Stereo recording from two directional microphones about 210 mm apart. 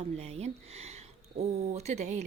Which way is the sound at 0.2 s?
30° right (ahead or behind).